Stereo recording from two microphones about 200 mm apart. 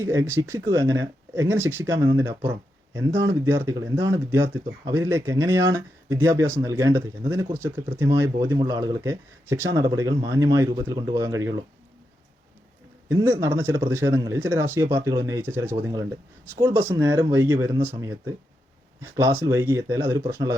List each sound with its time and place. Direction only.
0.0 s speech: 15° right (ahead or behind)
13.1 s speech: 10° right (ahead or behind)